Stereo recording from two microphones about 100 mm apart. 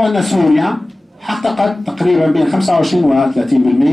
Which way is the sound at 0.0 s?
Centre (ahead or behind).